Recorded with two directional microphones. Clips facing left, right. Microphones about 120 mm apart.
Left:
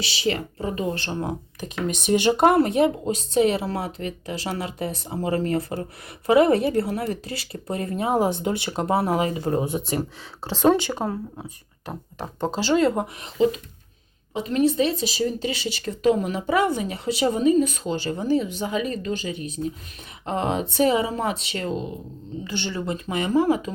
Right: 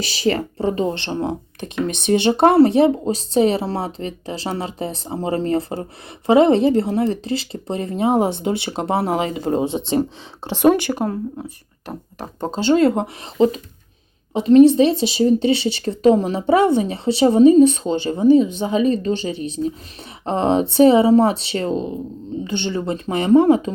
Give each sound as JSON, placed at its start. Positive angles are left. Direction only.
{"t": 0.0, "sound": "speech", "side_deg": -40}